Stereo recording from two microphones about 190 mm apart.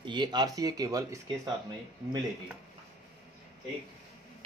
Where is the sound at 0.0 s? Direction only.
25° right (ahead or behind).